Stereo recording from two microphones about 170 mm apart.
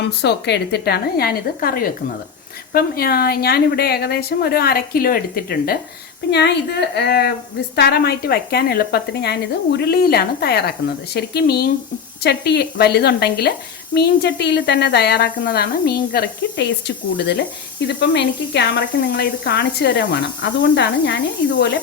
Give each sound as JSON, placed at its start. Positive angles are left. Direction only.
{"t": 0.0, "sound": "a woman's voice", "side_deg": 80}
{"t": 6.3, "sound": "a woman's voice", "side_deg": 75}